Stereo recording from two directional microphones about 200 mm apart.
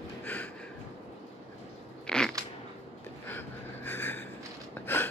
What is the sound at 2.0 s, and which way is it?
Biting, 5° left (ahead or behind).